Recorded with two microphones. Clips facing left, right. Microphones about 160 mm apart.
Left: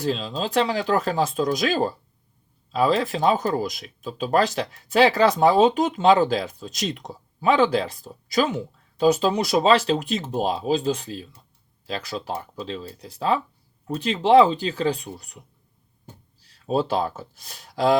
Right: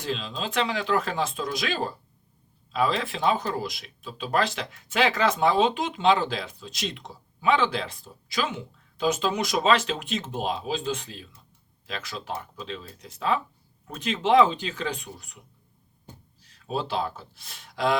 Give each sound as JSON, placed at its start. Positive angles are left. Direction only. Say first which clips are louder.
{"t": 0.0, "sound": "speech", "louder": "left 6 dB", "side_deg": 40}
{"t": 16.4, "sound": "speech", "louder": "left 7 dB", "side_deg": 35}